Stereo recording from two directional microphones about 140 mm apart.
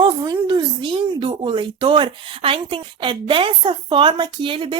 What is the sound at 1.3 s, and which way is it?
A woman's voice, 35° right (ahead or behind).